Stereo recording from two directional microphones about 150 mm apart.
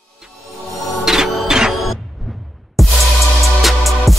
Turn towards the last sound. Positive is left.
turn(degrees=0)  # may be behind; listen again after turning